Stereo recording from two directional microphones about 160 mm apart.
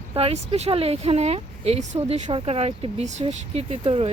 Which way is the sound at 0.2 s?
40° right (ahead or behind).